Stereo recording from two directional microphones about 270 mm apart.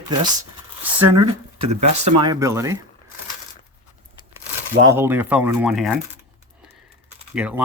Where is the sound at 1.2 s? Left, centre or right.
Right.